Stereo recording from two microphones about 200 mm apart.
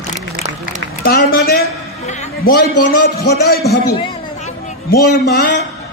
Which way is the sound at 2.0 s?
35° left (ahead or behind).